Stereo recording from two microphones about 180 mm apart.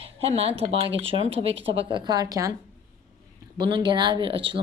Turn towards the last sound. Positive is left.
turn(degrees=-30)  # may be behind; listen again after turning